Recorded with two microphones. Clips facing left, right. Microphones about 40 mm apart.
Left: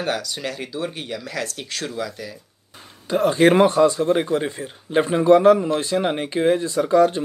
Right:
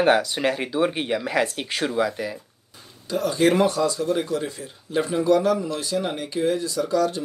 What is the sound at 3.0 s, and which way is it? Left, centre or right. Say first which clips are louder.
Speech: left 4 dB; left.